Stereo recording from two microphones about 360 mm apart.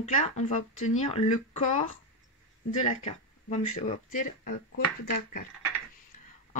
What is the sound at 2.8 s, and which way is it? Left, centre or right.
Speech, centre.